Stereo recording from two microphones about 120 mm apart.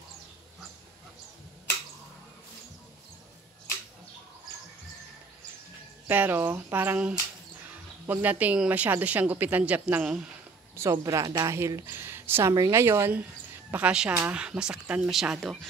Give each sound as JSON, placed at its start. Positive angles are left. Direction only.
{"t": 6.0, "sound": "speech", "side_deg": -15}
{"t": 10.8, "sound": "a woman's voice", "side_deg": -25}